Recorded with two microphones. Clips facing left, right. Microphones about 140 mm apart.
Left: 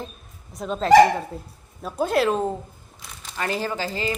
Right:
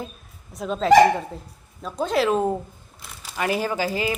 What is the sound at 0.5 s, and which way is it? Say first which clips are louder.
Speech: left 1 dB; centre (ahead or behind).